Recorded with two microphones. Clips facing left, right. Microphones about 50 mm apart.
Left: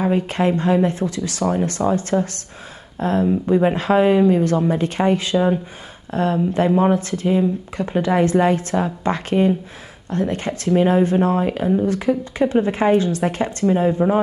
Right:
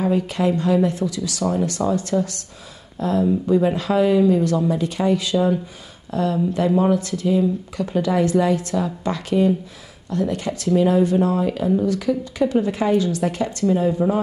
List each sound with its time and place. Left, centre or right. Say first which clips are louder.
0.0 s speech: left 1 dB; left